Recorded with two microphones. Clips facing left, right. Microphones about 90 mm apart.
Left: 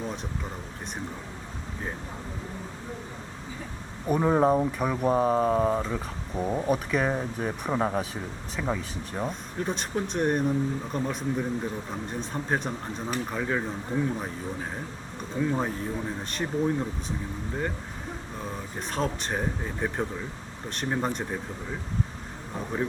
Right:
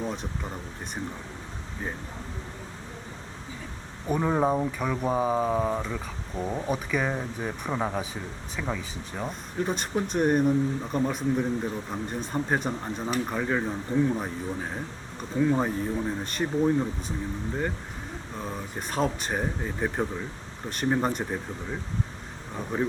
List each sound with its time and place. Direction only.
0.0 s speech: centre (ahead or behind)
4.0 s speech: 5° left (ahead or behind)
15.2 s speech: centre (ahead or behind)
18.3 s speech: centre (ahead or behind)
22.7 s speech: centre (ahead or behind)